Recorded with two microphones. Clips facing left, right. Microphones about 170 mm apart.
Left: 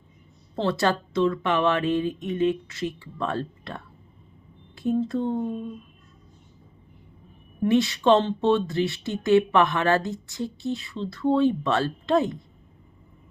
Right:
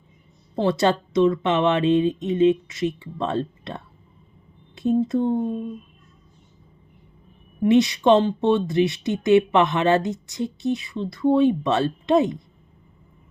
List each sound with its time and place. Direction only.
0.5 s speech: 20° right (ahead or behind)
7.6 s speech: 15° right (ahead or behind)